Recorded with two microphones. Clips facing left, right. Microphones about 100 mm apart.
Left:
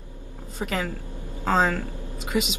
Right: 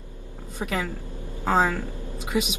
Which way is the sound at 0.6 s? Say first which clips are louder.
Even; 15° right (ahead or behind).